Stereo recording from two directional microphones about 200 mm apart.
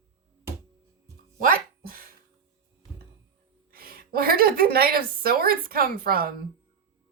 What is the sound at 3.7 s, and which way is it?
A woman's voice, 45° right (ahead or behind).